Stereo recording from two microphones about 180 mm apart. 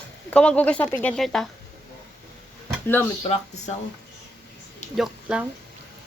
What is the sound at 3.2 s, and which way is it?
Speech, 40° left (ahead or behind).